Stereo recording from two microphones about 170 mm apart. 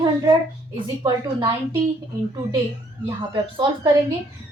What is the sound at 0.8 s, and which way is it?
Speech, 30° right (ahead or behind).